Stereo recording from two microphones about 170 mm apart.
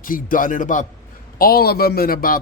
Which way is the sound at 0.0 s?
55° left (ahead or behind).